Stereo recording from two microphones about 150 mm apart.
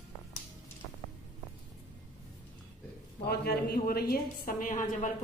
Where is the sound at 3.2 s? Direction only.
90° left.